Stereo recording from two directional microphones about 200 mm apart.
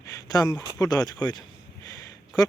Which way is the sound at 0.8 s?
20° left (ahead or behind).